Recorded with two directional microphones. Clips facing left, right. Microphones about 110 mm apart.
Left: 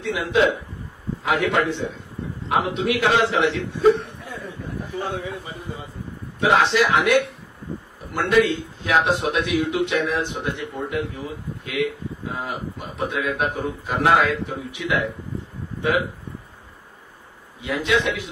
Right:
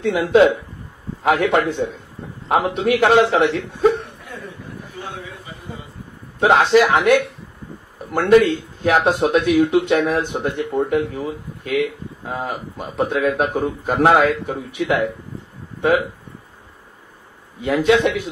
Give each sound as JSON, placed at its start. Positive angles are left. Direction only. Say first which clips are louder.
{"t": 0.0, "sound": "speech", "louder": "right 6 dB", "side_deg": -50}
{"t": 6.4, "sound": "speech", "louder": "right 4 dB", "side_deg": -45}
{"t": 17.6, "sound": "speech", "louder": "right 6 dB", "side_deg": -50}